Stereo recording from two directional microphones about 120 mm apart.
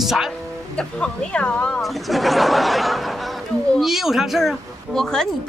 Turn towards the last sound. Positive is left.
turn(degrees=5)  # may be behind; listen again after turning